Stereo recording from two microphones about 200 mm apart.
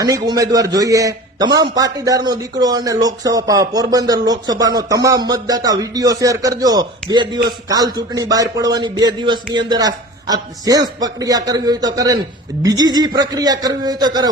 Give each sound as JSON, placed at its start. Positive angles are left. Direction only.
{"t": 0.3, "sound": "a man's voice", "side_deg": -15}